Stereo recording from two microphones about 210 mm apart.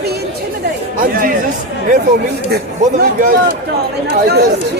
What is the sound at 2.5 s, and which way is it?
Speech, 45° right (ahead or behind).